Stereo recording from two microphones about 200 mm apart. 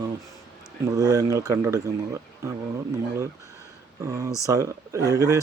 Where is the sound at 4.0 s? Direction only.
15° right (ahead or behind).